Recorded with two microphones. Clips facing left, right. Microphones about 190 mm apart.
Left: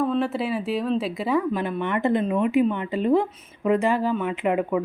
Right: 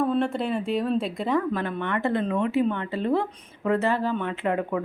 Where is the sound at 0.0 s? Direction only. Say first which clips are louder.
Left 1 dB; centre (ahead or behind).